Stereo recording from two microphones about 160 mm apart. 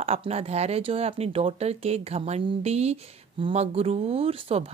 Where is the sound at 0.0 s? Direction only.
40° right (ahead or behind).